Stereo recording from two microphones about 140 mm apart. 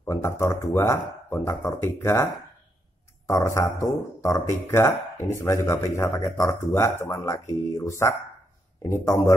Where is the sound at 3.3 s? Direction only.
20° left (ahead or behind).